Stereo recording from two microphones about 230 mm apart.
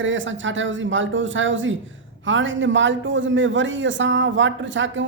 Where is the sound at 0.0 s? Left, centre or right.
Right.